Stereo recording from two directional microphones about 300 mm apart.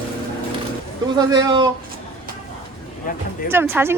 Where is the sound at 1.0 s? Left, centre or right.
Centre.